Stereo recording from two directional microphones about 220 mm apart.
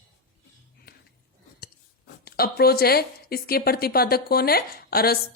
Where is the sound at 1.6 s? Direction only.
45° left (ahead or behind).